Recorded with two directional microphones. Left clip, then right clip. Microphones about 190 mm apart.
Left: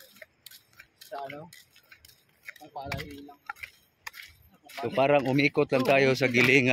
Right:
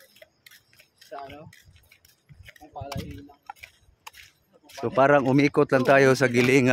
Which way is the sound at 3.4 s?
Centre (ahead or behind).